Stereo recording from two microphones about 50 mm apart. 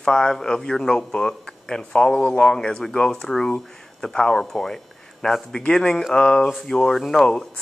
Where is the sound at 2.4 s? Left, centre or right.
Centre.